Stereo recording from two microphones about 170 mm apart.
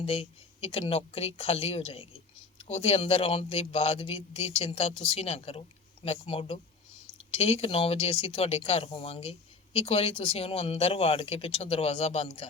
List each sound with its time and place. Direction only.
0.0 s a man's voice: 35° left (ahead or behind)